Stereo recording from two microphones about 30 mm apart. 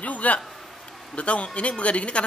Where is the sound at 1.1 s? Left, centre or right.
Left.